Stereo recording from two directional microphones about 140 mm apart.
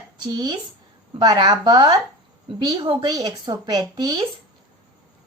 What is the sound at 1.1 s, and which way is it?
A woman's voice, 30° right (ahead or behind).